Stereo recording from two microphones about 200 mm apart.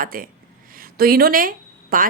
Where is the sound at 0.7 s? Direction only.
45° right (ahead or behind).